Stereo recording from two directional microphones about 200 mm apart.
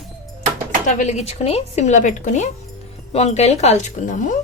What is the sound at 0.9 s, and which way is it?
Speech, 35° left (ahead or behind).